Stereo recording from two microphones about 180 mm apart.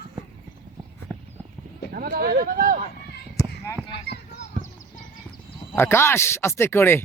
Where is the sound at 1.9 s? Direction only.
55° right (ahead or behind).